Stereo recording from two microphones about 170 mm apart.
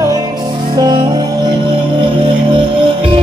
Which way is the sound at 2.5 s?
30° right (ahead or behind).